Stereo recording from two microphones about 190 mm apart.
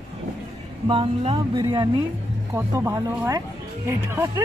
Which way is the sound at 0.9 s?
30° right (ahead or behind).